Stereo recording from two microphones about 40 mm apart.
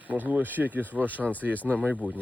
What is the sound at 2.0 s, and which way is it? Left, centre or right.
Speech, right.